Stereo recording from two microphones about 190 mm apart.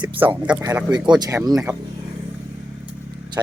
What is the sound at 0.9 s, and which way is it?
Speech, 20° right (ahead or behind).